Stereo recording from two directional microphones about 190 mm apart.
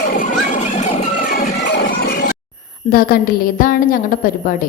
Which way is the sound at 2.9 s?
50° left (ahead or behind).